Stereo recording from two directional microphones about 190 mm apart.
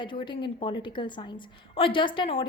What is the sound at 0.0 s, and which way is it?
A woman's voice, 25° left (ahead or behind).